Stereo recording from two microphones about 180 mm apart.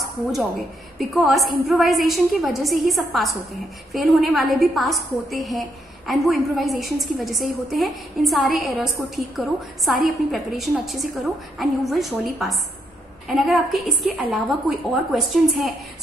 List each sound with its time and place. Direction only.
0.9 s a woman's voice: centre (ahead or behind)
9.9 s a woman's voice: centre (ahead or behind)